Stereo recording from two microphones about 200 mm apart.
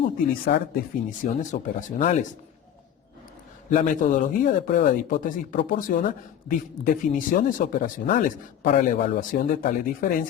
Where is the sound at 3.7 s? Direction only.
40° left (ahead or behind).